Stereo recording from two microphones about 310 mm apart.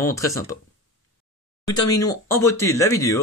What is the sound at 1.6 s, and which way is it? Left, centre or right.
Speech, centre.